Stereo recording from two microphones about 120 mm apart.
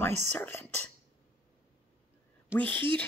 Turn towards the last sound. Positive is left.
turn(degrees=15)  # may be behind; listen again after turning